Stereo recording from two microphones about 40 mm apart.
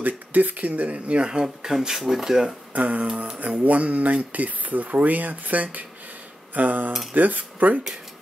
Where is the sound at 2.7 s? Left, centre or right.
Right.